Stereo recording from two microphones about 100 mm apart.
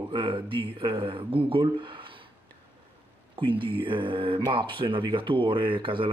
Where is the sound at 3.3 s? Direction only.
60° right (ahead or behind).